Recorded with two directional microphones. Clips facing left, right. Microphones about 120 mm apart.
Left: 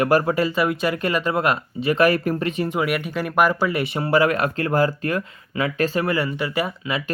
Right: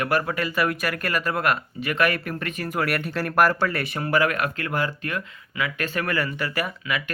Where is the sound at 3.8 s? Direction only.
20° left (ahead or behind).